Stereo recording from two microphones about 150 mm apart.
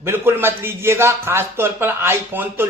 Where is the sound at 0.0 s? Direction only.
15° right (ahead or behind).